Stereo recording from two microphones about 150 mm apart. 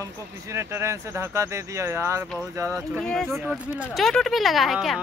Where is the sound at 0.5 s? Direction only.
15° right (ahead or behind).